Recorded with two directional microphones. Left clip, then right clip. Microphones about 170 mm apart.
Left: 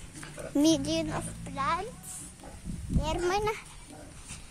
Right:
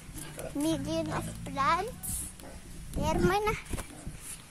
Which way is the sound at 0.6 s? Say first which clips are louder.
Left 6 dB; 40° left (ahead or behind).